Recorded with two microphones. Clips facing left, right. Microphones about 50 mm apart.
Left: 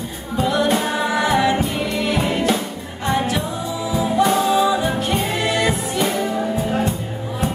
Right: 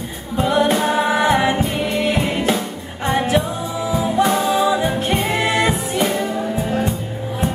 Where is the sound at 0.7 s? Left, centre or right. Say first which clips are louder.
Right 2 dB; centre.